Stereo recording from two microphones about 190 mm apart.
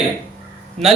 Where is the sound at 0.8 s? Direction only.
35° right (ahead or behind).